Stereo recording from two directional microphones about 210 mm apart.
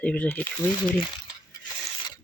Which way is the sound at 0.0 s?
5° left (ahead or behind).